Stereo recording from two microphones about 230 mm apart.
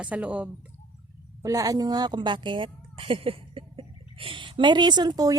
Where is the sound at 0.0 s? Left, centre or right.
Centre.